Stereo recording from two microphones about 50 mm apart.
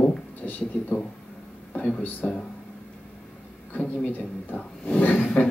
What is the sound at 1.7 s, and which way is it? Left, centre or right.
Speech, left.